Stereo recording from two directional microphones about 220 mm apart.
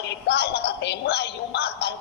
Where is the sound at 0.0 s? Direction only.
50° left (ahead or behind).